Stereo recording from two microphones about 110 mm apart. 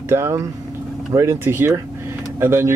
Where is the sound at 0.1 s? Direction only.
25° right (ahead or behind).